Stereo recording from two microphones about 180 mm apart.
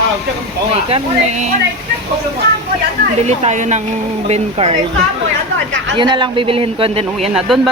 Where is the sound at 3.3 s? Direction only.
40° right (ahead or behind).